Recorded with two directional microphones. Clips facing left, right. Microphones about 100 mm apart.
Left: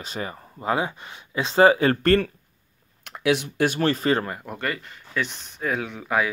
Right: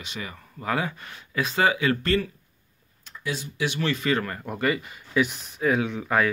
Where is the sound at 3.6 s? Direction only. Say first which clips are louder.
Left 2 dB; 45° left (ahead or behind).